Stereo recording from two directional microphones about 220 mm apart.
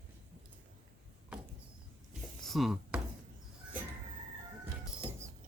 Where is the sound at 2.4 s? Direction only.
Centre (ahead or behind).